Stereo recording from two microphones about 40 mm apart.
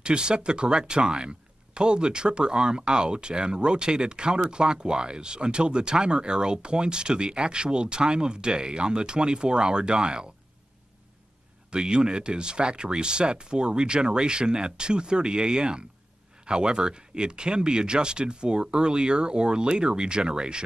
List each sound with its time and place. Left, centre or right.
0.0 s speech: right
11.7 s speech: right